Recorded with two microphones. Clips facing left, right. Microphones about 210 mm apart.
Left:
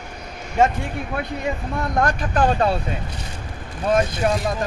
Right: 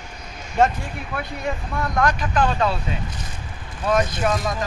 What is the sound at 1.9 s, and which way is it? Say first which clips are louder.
Speech: even; 30° left (ahead or behind).